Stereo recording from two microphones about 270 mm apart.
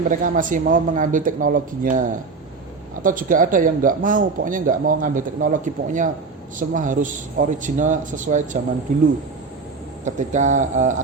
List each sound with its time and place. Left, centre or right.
0.1 s speech: right